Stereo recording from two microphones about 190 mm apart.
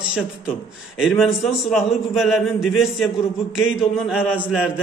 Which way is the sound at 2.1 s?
Centre (ahead or behind).